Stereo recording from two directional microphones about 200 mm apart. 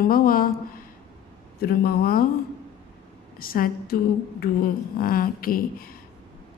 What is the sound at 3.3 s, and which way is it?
A woman's voice, 45° left (ahead or behind).